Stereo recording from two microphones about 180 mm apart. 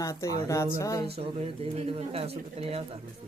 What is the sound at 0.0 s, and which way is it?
Speech, 20° left (ahead or behind).